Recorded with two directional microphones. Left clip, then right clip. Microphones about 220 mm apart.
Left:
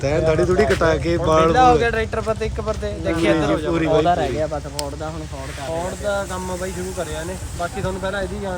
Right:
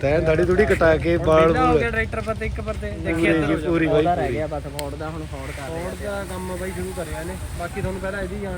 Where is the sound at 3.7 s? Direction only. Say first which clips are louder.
Left 1 dB; 5° left (ahead or behind).